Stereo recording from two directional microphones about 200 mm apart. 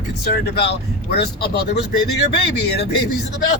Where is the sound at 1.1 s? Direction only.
55° left (ahead or behind).